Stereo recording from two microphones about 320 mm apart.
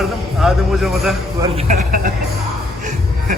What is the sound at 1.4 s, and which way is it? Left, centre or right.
Speech, right.